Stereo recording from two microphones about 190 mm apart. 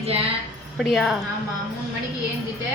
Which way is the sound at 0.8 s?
Centre (ahead or behind).